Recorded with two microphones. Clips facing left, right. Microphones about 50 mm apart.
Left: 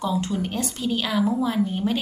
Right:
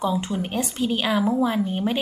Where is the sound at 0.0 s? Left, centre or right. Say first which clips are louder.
Right 1 dB; centre.